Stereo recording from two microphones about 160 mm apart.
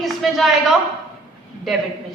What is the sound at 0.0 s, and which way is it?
Speech, centre (ahead or behind).